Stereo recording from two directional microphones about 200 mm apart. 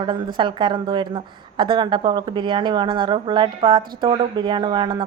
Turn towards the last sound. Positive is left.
turn(degrees=-25)  # may be behind; listen again after turning